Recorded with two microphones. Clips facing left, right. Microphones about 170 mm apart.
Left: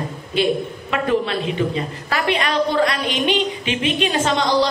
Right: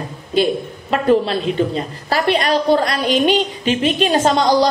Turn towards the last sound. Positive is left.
turn(degrees=-40)  # may be behind; listen again after turning